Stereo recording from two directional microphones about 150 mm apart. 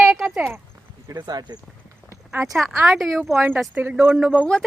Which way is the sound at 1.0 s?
25° right (ahead or behind).